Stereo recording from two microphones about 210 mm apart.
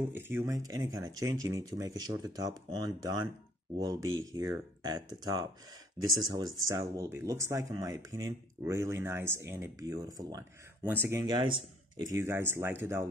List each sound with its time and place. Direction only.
0.1 s speech: 10° right (ahead or behind)
4.3 s speech: 15° right (ahead or behind)